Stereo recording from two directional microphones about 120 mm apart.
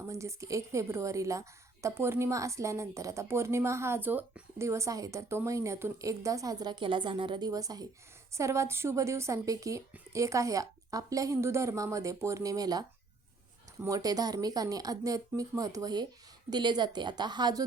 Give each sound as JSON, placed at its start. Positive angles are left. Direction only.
{"t": 0.1, "sound": "a woman's voice", "side_deg": -25}